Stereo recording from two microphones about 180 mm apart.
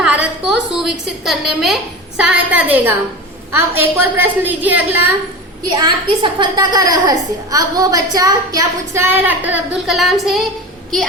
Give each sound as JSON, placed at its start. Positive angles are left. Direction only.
{"t": 0.0, "sound": "a sound", "side_deg": -5}
{"t": 0.7, "sound": "a woman's voice", "side_deg": 0}
{"t": 5.7, "sound": "a woman's voice", "side_deg": -25}